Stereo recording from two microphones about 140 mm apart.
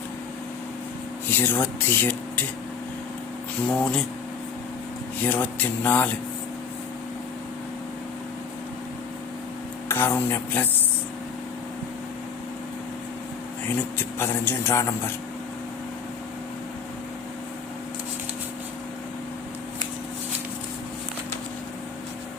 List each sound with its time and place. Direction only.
1.3 s speech: 15° left (ahead or behind)
3.7 s speech: 5° left (ahead or behind)
5.2 s speech: 10° left (ahead or behind)
9.9 s speech: 15° left (ahead or behind)
13.7 s speech: 15° left (ahead or behind)